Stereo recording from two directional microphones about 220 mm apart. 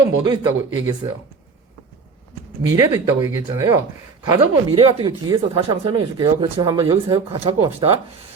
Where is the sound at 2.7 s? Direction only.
15° right (ahead or behind).